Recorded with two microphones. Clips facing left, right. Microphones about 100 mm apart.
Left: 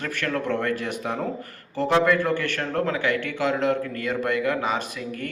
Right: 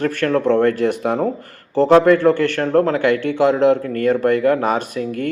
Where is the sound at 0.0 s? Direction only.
45° right (ahead or behind).